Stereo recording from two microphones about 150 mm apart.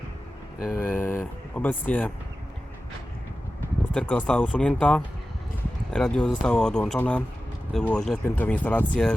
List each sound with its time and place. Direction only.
0.6 s speech: 5° left (ahead or behind)
3.9 s speech: 5° left (ahead or behind)